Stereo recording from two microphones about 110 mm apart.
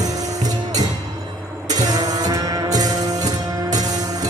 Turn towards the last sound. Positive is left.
turn(degrees=-35)  # may be behind; listen again after turning